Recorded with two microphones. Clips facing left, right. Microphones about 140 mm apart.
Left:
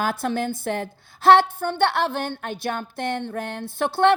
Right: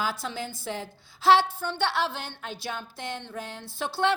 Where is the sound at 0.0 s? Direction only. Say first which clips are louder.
Left 7 dB; 55° left (ahead or behind).